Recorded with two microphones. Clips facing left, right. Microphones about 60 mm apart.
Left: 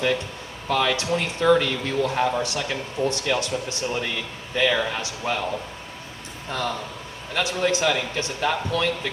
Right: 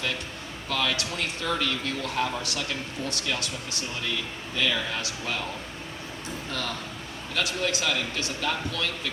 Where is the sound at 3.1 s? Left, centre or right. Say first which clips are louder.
Left 7 dB; left.